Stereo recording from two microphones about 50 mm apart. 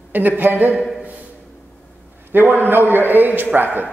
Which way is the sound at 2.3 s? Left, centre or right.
Right.